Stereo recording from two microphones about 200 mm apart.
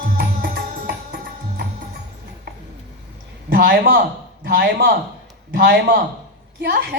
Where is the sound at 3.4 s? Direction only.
55° right (ahead or behind).